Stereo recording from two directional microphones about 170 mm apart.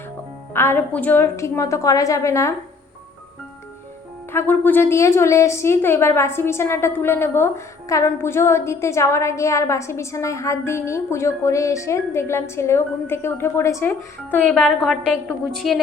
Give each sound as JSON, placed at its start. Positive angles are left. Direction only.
{"t": 0.5, "sound": "a woman's voice", "side_deg": 15}
{"t": 4.3, "sound": "a woman's voice", "side_deg": 10}